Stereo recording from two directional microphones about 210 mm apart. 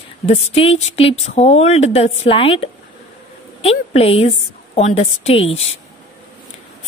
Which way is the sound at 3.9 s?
30° left (ahead or behind).